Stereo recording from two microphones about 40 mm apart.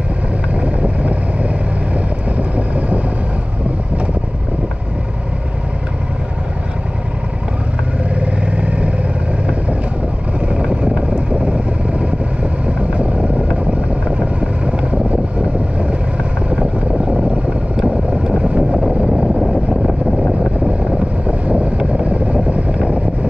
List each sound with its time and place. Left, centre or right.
0.6 s boat: right
2.0 s vehicle: right
8.2 s vehicle: right
10.4 s vehicle: right
17.0 s vehicle: right
18.9 s vehicle: right
19.4 s vehicle: centre
21.3 s wind noise: right